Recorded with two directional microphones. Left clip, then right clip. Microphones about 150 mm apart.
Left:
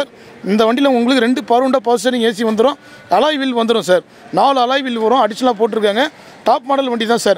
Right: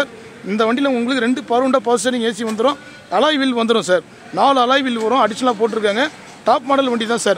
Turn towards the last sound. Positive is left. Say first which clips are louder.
# left 3 dB
turn(degrees=35)  # may be behind; listen again after turning